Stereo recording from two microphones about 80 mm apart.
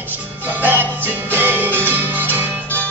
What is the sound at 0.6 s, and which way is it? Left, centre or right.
Music, right.